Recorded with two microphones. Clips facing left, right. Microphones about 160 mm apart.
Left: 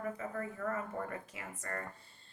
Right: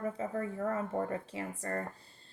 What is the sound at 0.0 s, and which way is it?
Speech, 25° right (ahead or behind).